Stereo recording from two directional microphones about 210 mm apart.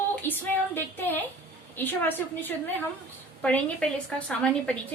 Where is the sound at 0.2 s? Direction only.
10° left (ahead or behind).